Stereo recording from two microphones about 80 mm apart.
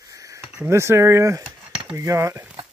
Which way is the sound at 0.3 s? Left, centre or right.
Right.